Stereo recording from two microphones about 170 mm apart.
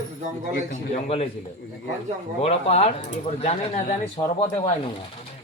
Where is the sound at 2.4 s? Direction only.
35° left (ahead or behind).